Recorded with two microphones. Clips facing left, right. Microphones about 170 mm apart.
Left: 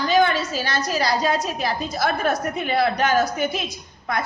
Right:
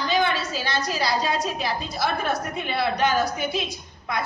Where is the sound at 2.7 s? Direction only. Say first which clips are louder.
Left 3 dB; 45° left (ahead or behind).